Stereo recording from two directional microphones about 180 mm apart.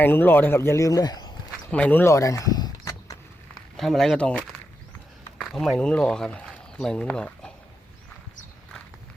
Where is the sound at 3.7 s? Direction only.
Centre (ahead or behind).